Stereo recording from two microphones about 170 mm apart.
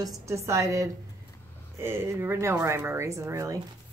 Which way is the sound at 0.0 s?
15° right (ahead or behind).